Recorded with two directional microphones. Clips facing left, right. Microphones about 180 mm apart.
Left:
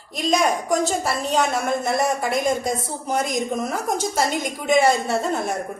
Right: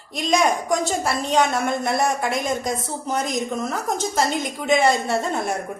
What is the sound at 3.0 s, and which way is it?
Speech, 10° left (ahead or behind).